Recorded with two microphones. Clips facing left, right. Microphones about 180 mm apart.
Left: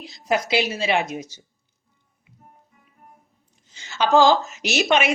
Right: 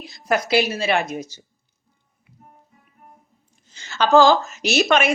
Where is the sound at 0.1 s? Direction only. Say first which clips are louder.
Right 2 dB; 15° left (ahead or behind).